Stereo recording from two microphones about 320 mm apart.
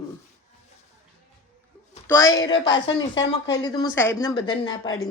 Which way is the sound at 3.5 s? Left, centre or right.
Centre.